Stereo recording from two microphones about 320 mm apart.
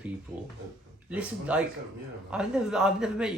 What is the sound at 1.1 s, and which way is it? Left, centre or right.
Speech, centre.